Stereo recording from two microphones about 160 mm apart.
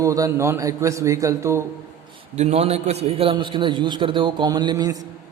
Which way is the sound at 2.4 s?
40° right (ahead or behind).